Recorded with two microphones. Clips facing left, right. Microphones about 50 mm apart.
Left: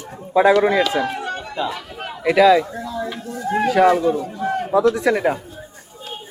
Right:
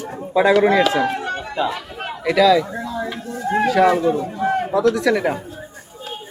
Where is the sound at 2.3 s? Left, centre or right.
Left.